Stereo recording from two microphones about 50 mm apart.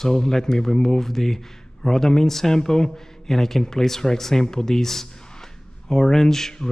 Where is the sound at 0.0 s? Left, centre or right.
Centre.